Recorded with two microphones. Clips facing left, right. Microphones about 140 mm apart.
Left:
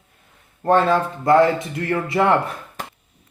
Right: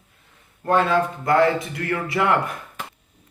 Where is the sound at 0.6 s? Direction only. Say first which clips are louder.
Left 2 dB; 35° left (ahead or behind).